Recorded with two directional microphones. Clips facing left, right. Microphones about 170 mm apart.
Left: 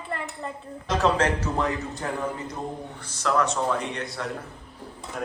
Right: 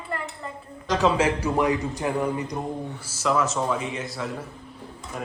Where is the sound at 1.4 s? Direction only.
15° right (ahead or behind).